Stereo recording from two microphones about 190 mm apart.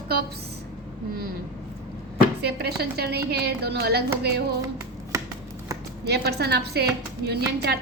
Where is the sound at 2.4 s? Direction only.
55° right (ahead or behind).